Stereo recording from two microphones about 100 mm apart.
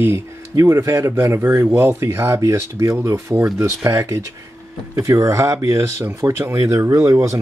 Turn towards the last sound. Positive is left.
turn(degrees=-35)  # may be behind; listen again after turning